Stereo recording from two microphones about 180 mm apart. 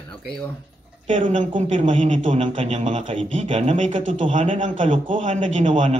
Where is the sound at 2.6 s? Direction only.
40° right (ahead or behind).